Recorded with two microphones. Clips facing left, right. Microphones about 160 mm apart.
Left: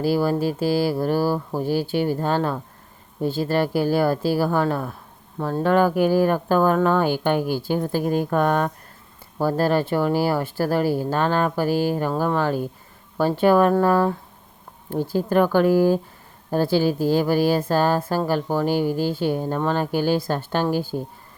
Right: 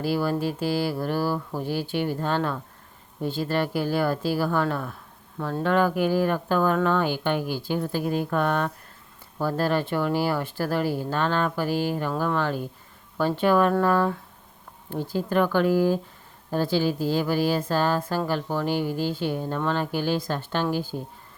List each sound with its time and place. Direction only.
0.1 s a woman's voice: 35° left (ahead or behind)